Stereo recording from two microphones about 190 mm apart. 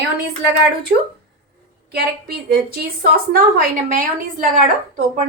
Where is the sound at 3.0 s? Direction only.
50° right (ahead or behind).